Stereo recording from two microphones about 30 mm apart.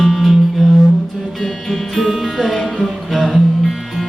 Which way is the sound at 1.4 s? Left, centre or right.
Centre.